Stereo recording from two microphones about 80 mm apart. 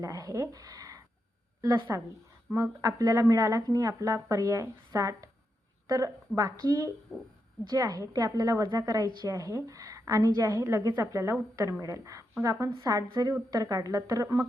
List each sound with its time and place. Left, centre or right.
0.0 s a woman's voice: right